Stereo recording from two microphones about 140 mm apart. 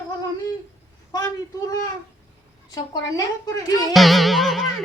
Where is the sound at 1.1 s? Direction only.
25° left (ahead or behind).